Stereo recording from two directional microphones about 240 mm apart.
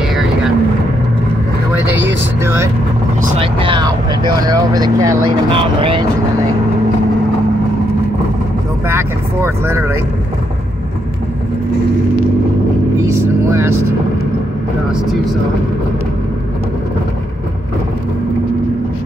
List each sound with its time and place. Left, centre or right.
1.7 s vehicle: centre
3.3 s vehicle: right
4.4 s speech: centre
8.8 s speech: centre